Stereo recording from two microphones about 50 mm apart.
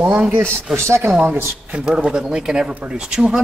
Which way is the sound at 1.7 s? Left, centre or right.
Right.